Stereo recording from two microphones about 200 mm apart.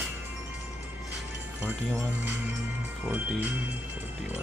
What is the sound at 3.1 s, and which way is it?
Music, 10° right (ahead or behind).